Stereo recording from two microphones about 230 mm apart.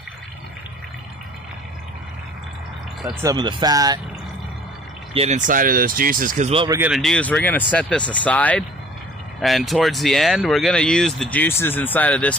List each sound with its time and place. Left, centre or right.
3.1 s speech: centre
5.1 s speech: right
6.7 s speech: centre